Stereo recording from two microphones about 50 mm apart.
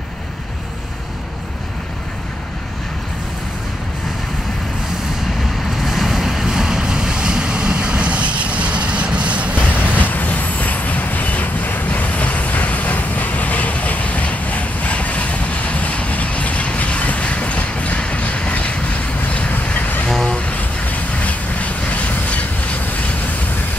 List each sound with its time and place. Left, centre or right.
5.7 s waves: centre; by 10.0 s right
10.0 s vehicle: left
19.2 s train: left
19.5 s vehicle: left
20.1 s a sound: centre
20.3 s vehicle: left